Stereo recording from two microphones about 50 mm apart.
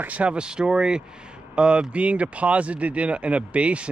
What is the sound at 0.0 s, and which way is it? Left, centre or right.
Speech, right.